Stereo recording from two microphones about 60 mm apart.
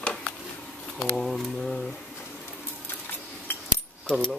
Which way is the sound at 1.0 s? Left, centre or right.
Centre.